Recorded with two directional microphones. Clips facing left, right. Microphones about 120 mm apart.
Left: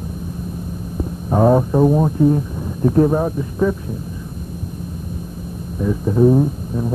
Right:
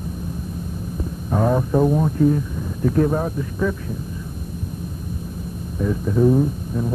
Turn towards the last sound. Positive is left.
turn(degrees=15)  # may be behind; listen again after turning